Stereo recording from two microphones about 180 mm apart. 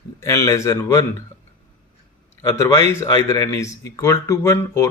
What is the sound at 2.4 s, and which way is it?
Speech, 15° left (ahead or behind).